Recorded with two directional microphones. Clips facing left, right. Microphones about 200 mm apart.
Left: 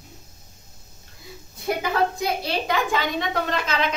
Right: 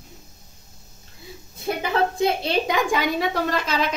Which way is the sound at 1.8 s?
25° right (ahead or behind).